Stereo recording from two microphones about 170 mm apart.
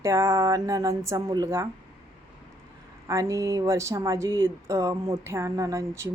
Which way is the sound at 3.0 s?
20° right (ahead or behind).